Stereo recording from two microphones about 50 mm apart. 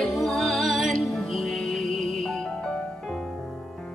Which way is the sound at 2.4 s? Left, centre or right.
Centre.